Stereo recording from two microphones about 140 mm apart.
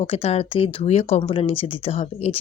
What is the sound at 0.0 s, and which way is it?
A woman's voice, 45° left (ahead or behind).